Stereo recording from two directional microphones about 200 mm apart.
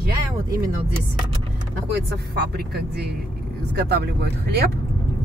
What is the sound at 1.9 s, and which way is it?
Speech, 55° right (ahead or behind).